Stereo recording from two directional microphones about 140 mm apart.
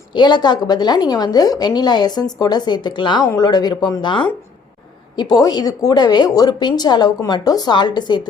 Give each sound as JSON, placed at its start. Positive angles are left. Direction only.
{"t": 0.1, "sound": "a woman's voice", "side_deg": 30}